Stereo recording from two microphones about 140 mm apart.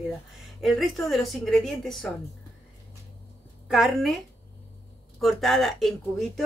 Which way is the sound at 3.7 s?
Centre (ahead or behind).